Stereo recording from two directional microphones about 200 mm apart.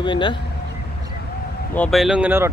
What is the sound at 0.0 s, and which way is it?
Speech, 25° left (ahead or behind).